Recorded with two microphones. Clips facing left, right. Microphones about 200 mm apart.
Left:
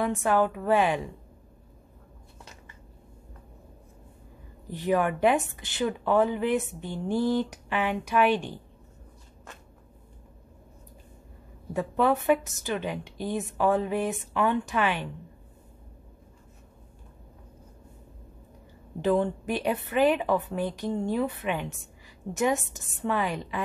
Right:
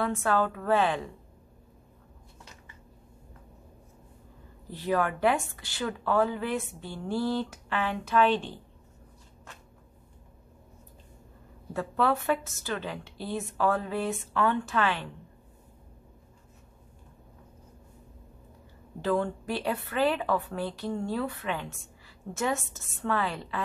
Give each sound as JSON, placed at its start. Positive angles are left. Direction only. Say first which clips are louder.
{"t": 0.0, "sound": "speech", "louder": "left 3 dB", "side_deg": 15}
{"t": 4.6, "sound": "speech", "louder": "left 3 dB", "side_deg": 15}
{"t": 11.7, "sound": "speech", "louder": "left 3 dB", "side_deg": 15}
{"t": 18.9, "sound": "speech", "louder": "left 3 dB", "side_deg": 20}